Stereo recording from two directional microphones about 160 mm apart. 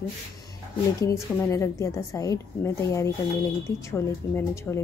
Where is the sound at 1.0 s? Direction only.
20° left (ahead or behind).